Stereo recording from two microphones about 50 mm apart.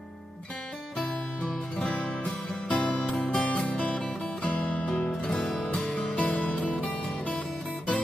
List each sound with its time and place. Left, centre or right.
0.9 s music: centre
1.8 s music: left
3.4 s music: left; by 6.1 s centre
6.1 s music: left